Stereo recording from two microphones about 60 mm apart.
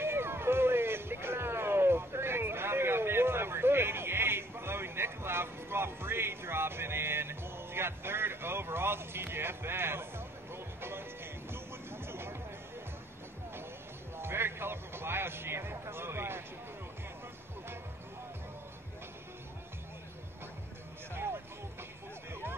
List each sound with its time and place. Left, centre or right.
0.0 s music: right
14.1 s music: right
21.1 s music: right